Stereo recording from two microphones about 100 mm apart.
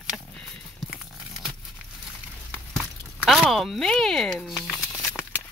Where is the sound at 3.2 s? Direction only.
Centre (ahead or behind).